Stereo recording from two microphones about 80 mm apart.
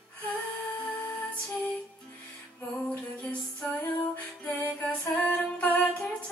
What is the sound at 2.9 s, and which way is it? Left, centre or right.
Music, centre.